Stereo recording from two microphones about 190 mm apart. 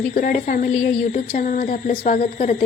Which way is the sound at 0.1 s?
45° left (ahead or behind).